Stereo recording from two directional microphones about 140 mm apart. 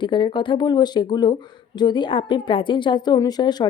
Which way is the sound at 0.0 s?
35° left (ahead or behind).